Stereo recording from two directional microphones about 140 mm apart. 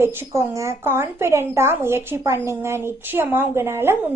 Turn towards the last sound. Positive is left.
turn(degrees=-15)  # may be behind; listen again after turning